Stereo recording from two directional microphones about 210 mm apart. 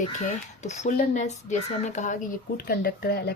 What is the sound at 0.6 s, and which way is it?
Speech, 35° left (ahead or behind).